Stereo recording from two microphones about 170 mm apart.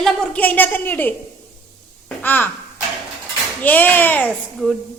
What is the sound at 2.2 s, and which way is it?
Speech, 10° left (ahead or behind).